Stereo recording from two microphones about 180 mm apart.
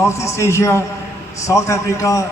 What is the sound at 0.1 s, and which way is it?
A man's voice, 15° left (ahead or behind).